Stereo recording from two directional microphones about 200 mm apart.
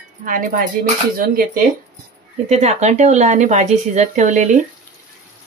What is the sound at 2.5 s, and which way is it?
Speech, 35° right (ahead or behind).